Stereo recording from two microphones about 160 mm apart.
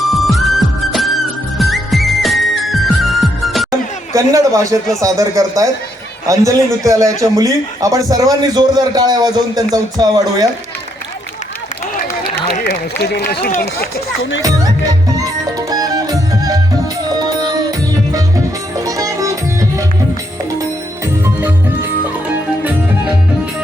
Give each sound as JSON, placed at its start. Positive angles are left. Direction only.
{"t": 0.0, "sound": "music", "side_deg": 0}
{"t": 4.1, "sound": "a man's voice", "side_deg": -20}
{"t": 12.6, "sound": "speech", "side_deg": 85}
{"t": 15.1, "sound": "music", "side_deg": -20}
{"t": 21.2, "sound": "music", "side_deg": -15}